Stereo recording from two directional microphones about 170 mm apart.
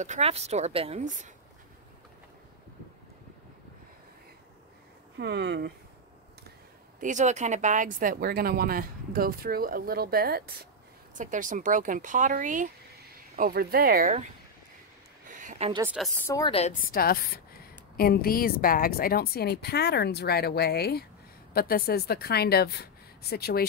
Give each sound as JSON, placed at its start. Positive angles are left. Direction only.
{"t": 0.0, "sound": "a woman's voice", "side_deg": -40}
{"t": 5.2, "sound": "speech", "side_deg": -80}
{"t": 7.0, "sound": "speech", "side_deg": -45}
{"t": 11.1, "sound": "speech", "side_deg": -50}
{"t": 13.4, "sound": "speech", "side_deg": -65}
{"t": 15.2, "sound": "a sound", "side_deg": -45}
{"t": 16.3, "sound": "a woman's voice", "side_deg": 20}
{"t": 16.8, "sound": "a woman's voice", "side_deg": 60}